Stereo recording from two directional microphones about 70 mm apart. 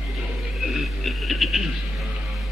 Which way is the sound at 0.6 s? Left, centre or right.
Centre.